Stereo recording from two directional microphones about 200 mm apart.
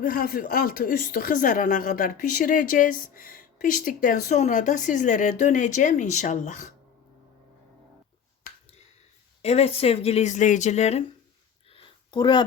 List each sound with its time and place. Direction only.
0.0 s speech: 45° left (ahead or behind)
9.4 s speech: 30° left (ahead or behind)
11.7 s a sound: 25° left (ahead or behind)